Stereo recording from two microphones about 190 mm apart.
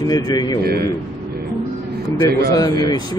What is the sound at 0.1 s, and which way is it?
Speech, 20° left (ahead or behind).